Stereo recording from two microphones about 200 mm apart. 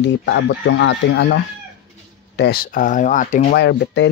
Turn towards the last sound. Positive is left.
turn(degrees=60)  # may be behind; listen again after turning